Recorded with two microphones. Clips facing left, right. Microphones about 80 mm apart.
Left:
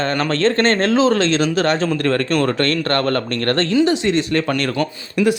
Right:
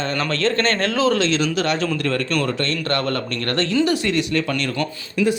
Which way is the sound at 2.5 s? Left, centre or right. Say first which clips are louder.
Left 4 dB; left.